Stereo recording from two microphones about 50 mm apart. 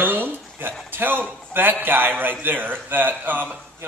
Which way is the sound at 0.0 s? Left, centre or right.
Right.